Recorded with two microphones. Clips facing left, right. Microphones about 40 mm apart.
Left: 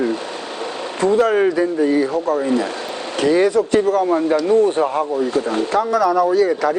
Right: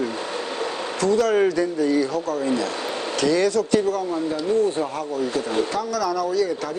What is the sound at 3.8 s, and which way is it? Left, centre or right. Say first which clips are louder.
Speech: left 7 dB; left.